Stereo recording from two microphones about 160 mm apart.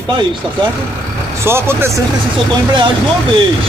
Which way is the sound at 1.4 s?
15° right (ahead or behind).